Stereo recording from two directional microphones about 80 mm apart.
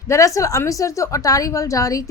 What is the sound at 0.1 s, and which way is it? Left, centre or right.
A woman's voice, left.